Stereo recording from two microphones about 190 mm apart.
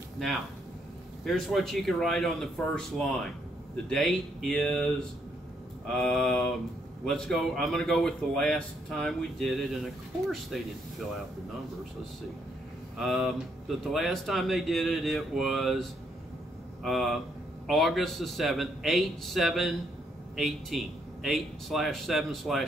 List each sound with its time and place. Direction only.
1.2 s speech: centre (ahead or behind)
13.0 s speech: centre (ahead or behind)